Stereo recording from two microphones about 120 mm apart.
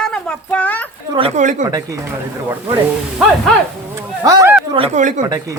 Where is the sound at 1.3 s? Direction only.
90° right.